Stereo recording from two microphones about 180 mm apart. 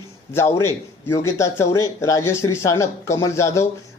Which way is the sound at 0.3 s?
15° left (ahead or behind).